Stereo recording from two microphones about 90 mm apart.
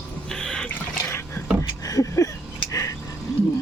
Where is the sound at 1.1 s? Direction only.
30° left (ahead or behind).